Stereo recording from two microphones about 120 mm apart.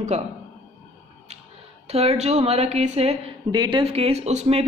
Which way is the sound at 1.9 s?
60° right (ahead or behind).